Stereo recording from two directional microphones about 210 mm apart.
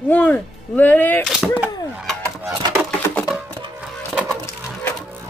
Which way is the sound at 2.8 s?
5° left (ahead or behind).